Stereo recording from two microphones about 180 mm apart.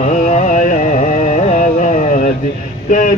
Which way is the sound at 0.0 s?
40° left (ahead or behind).